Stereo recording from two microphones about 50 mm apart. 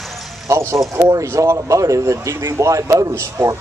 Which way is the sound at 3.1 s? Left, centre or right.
Right.